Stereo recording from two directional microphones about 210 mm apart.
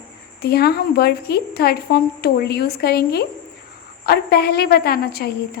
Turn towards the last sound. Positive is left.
turn(degrees=50)  # may be behind; listen again after turning